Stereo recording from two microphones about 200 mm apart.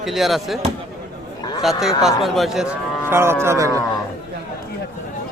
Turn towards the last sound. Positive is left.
turn(degrees=-15)  # may be behind; listen again after turning